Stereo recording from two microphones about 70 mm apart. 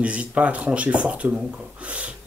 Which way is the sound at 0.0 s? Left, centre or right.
Centre.